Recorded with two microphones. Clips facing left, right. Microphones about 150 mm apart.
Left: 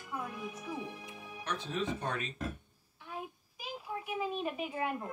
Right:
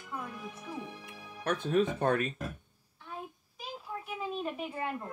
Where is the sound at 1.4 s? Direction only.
55° right (ahead or behind).